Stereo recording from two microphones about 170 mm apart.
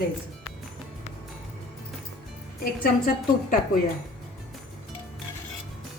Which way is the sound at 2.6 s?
55° left (ahead or behind).